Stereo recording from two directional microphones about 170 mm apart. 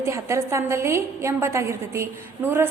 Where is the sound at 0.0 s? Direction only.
15° right (ahead or behind).